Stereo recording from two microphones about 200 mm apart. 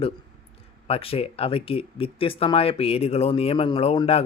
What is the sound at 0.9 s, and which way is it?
Speech, 30° left (ahead or behind).